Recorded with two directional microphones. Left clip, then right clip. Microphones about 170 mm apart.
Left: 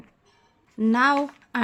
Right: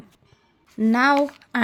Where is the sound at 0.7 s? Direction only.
20° right (ahead or behind).